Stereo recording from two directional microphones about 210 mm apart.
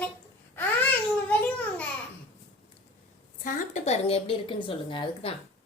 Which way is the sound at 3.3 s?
40° left (ahead or behind).